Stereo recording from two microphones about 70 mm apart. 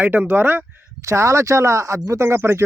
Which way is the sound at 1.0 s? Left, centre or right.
Right.